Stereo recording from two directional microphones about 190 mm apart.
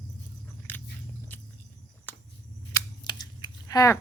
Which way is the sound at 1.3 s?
10° left (ahead or behind).